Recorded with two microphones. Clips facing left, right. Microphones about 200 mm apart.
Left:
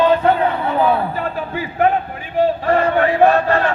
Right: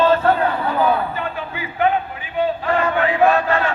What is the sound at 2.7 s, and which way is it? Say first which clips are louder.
Crowd: left 3 dB; 40° left (ahead or behind).